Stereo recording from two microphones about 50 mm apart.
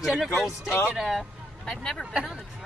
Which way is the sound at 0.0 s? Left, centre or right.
Centre.